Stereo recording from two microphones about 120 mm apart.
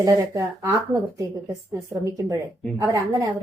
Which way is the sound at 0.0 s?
30° right (ahead or behind).